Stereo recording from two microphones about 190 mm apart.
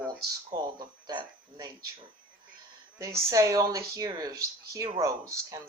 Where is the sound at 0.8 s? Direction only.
20° right (ahead or behind).